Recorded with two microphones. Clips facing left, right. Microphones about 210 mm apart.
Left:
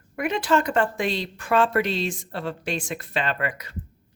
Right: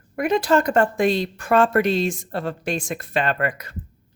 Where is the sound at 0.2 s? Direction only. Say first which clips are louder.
Right 4 dB; 40° right (ahead or behind).